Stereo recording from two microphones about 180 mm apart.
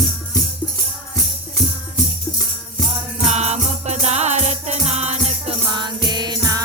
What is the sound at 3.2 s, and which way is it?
Music, 35° right (ahead or behind).